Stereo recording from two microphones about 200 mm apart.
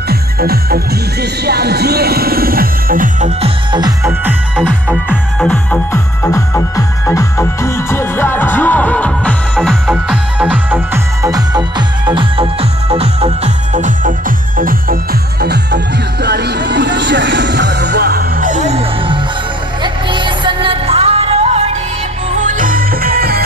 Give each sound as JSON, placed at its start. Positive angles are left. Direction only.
{"t": 0.1, "sound": "music", "side_deg": -50}
{"t": 1.4, "sound": "speech", "side_deg": -55}
{"t": 4.2, "sound": "music", "side_deg": -10}
{"t": 5.4, "sound": "music", "side_deg": 5}
{"t": 14.6, "sound": "speech", "side_deg": -45}
{"t": 15.4, "sound": "speech", "side_deg": -55}
{"t": 19.8, "sound": "music", "side_deg": -25}
{"t": 22.5, "sound": "music", "side_deg": -45}